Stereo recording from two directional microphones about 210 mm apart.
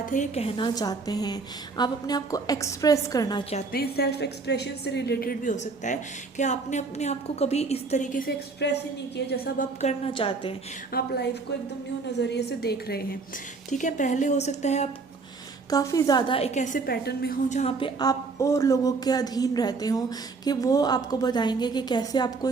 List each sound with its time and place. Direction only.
0.0 s speech: 35° left (ahead or behind); by 3.4 s 20° left (ahead or behind)
3.7 s a woman's voice: 50° left (ahead or behind)
9.8 s speech: 25° left (ahead or behind)
10.9 s a woman's voice: 50° left (ahead or behind)
13.7 s a woman's voice: 35° left (ahead or behind)
15.7 s a woman's voice: 15° left (ahead or behind); by 17.3 s 50° left (ahead or behind)
17.5 s speech: 30° left (ahead or behind)